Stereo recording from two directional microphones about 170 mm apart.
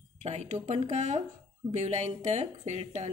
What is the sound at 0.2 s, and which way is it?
A woman's voice, 40° right (ahead or behind).